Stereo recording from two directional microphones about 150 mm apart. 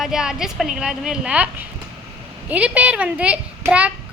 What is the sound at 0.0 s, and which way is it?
A woman's voice, 5° right (ahead or behind).